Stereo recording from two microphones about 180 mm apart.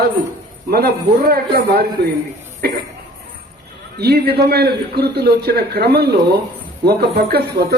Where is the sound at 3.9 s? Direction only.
65° right (ahead or behind).